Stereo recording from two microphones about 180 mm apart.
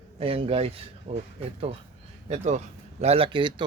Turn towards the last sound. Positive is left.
turn(degrees=-25)  # may be behind; listen again after turning